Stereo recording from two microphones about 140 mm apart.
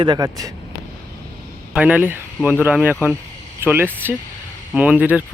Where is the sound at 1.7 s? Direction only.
10° right (ahead or behind).